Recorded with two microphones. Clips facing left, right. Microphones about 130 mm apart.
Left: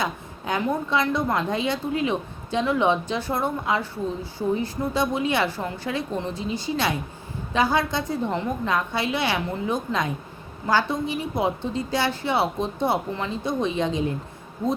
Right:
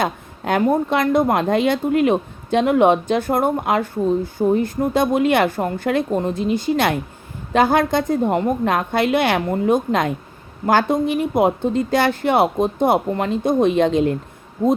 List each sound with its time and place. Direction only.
0.0 s a woman's voice: 55° right (ahead or behind)